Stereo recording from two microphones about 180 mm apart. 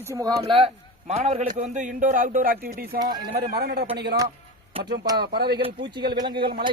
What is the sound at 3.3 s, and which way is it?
Speech, 60° right (ahead or behind).